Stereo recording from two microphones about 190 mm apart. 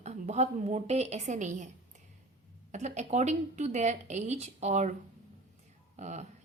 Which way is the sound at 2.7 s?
40° right (ahead or behind).